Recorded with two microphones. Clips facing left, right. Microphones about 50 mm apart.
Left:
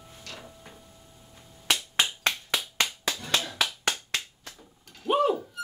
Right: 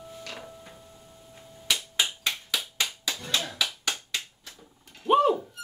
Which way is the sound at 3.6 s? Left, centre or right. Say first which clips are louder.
Left 2 dB; left.